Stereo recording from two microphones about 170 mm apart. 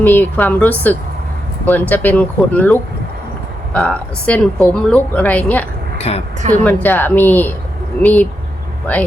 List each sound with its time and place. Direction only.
0.0 s speech: 10° left (ahead or behind)
6.1 s speech: 35° left (ahead or behind)
6.5 s speech: 10° left (ahead or behind)